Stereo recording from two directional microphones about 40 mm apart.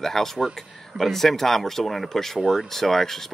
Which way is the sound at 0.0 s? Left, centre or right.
Centre.